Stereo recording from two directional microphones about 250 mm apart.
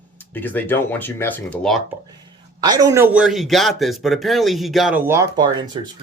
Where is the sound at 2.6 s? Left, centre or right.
Centre.